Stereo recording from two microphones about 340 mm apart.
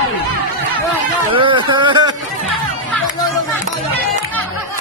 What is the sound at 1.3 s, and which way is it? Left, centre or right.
Speech, centre.